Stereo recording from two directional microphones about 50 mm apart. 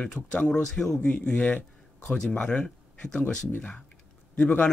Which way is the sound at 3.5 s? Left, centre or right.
Left.